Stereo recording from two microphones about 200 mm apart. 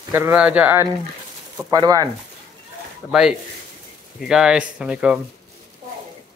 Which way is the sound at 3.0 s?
5° left (ahead or behind).